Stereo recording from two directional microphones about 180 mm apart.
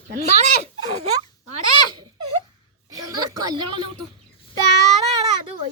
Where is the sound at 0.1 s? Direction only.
40° right (ahead or behind).